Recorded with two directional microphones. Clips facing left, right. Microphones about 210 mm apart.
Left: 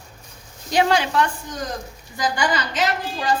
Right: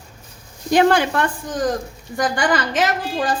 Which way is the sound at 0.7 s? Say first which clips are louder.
Right 4 dB; 55° right (ahead or behind).